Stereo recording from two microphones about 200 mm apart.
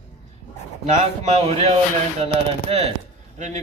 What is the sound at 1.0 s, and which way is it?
Speech, 30° right (ahead or behind).